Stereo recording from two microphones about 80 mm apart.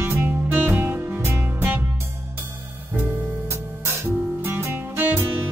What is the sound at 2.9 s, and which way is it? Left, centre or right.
Music, right.